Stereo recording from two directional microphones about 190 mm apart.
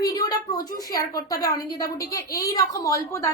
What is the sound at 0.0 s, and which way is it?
A woman's voice, 20° left (ahead or behind).